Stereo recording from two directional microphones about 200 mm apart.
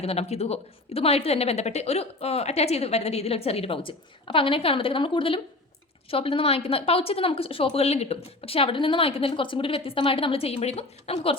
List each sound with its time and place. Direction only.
0.0 s speech: 30° left (ahead or behind)